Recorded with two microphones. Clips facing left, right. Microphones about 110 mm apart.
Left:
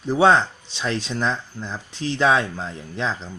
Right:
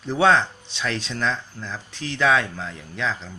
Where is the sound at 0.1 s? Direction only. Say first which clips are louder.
Left 2 dB; 15° left (ahead or behind).